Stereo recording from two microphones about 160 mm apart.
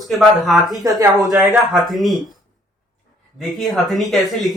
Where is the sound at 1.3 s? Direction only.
Centre (ahead or behind).